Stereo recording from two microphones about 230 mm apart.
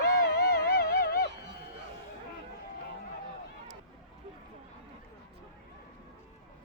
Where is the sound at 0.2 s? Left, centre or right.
Left.